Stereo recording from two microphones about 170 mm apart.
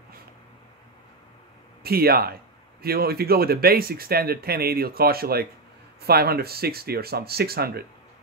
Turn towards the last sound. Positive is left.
turn(degrees=-65)  # may be behind; listen again after turning